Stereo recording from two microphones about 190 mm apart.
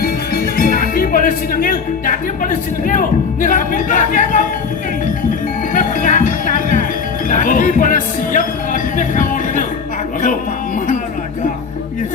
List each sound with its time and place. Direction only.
0.0 s speech: 50° left (ahead or behind)
5.7 s music: 45° left (ahead or behind)
7.3 s speech: 45° left (ahead or behind)